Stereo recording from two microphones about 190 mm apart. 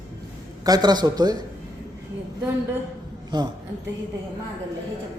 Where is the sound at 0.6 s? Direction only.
20° right (ahead or behind).